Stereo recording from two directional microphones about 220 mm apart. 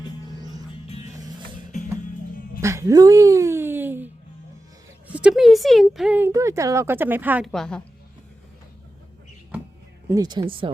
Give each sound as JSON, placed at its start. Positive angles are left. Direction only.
{"t": 0.3, "sound": "music", "side_deg": -20}
{"t": 0.9, "sound": "music", "side_deg": 25}
{"t": 2.6, "sound": "music", "side_deg": -15}
{"t": 5.1, "sound": "speech", "side_deg": -5}
{"t": 10.1, "sound": "speech", "side_deg": -20}